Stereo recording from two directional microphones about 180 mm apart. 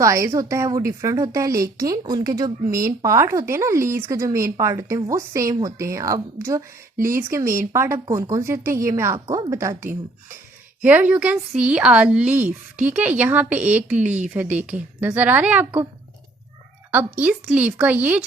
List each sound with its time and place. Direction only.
0.0 s a woman's voice: 15° right (ahead or behind)
16.9 s a woman's voice: 10° right (ahead or behind)